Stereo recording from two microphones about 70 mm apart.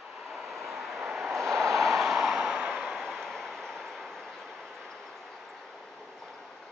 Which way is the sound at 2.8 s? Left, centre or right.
Centre.